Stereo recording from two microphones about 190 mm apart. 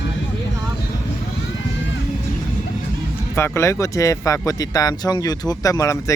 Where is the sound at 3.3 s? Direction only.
15° left (ahead or behind).